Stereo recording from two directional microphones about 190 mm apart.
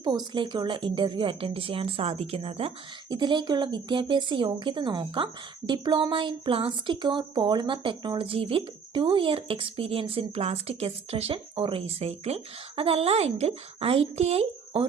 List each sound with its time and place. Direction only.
0.0 s a woman's voice: 25° right (ahead or behind)